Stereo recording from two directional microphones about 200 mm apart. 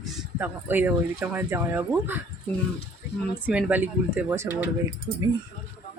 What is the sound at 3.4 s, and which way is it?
Speech, 10° right (ahead or behind).